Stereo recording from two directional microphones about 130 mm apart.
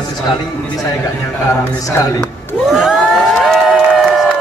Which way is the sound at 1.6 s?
25° left (ahead or behind).